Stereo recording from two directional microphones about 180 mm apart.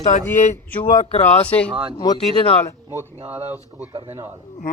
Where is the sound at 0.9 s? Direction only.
40° left (ahead or behind).